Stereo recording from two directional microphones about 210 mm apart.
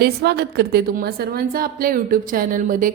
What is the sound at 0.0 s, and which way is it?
A woman's voice, 50° right (ahead or behind).